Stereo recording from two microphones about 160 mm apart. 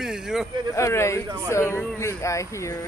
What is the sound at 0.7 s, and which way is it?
Speech, 15° left (ahead or behind).